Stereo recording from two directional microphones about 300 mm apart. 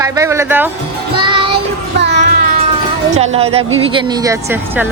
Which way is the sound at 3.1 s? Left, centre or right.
Right.